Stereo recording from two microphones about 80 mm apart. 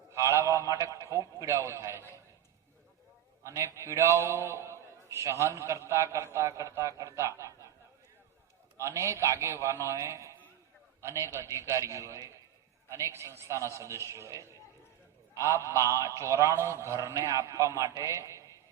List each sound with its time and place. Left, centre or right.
0.1 s a man's voice: right
3.4 s a man's voice: right
8.8 s a man's voice: right